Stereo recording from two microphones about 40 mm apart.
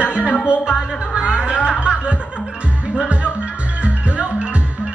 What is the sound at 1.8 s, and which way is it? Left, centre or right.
Snicker, right.